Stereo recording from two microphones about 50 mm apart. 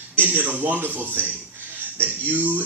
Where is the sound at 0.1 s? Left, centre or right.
Right.